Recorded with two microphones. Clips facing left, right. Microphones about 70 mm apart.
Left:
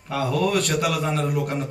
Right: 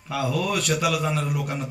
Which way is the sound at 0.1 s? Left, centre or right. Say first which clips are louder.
Left 3 dB; left.